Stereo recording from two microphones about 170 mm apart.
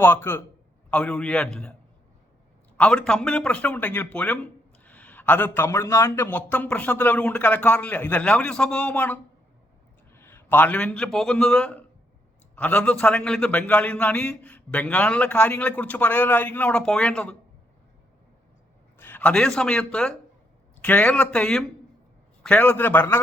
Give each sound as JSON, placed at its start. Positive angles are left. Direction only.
{"t": 0.0, "sound": "a man's voice", "side_deg": 15}
{"t": 2.7, "sound": "a man's voice", "side_deg": 5}
{"t": 18.9, "sound": "a man's voice", "side_deg": 10}